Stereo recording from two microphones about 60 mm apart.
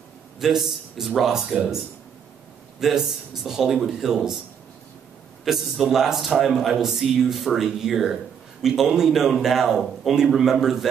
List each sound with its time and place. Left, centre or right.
0.4 s a man's voice: centre
2.8 s a man's voice: centre
5.4 s a man's voice: centre